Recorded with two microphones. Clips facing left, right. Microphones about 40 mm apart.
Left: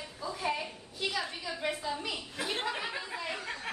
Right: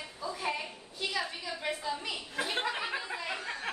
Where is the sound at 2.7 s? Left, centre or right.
Centre.